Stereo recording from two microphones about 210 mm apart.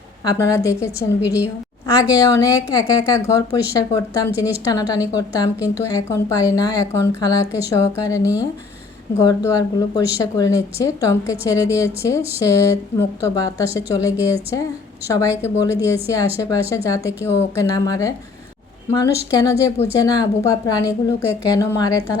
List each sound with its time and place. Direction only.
0.3 s a woman's voice: 15° left (ahead or behind)
1.2 s a woman's voice: 5° right (ahead or behind)
2.0 s a woman's voice: 15° left (ahead or behind)
15.4 s a woman's voice: 10° left (ahead or behind)